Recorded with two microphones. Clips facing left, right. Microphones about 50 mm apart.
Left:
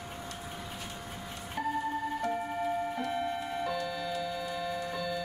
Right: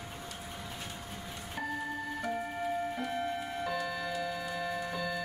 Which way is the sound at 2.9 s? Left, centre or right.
Centre.